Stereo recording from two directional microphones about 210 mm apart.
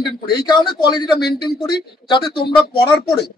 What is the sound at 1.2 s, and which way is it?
Speech, 50° left (ahead or behind).